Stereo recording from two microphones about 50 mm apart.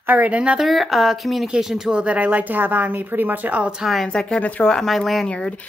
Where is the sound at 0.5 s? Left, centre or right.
Centre.